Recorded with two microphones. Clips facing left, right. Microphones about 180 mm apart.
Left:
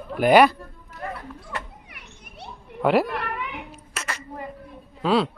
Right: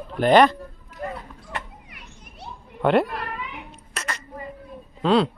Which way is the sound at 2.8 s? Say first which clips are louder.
Right 1 dB; 5° left (ahead or behind).